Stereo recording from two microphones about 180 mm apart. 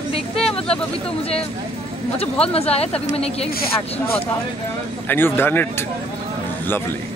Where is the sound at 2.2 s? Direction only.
35° left (ahead or behind).